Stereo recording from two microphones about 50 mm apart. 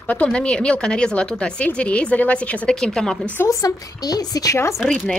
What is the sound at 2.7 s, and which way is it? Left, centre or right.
Speech, centre.